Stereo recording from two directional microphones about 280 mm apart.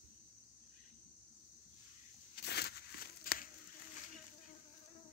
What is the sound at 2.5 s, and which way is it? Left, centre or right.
Crumpling, left.